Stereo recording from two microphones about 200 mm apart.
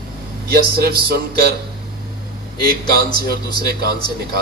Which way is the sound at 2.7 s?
50° right (ahead or behind).